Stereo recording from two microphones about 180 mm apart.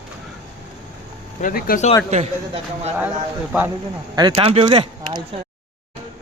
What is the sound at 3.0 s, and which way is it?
Speech, 10° right (ahead or behind).